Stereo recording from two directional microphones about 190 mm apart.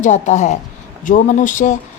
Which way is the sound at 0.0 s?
40° left (ahead or behind).